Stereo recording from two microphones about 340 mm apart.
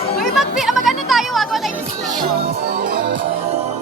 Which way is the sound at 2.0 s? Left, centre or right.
Centre.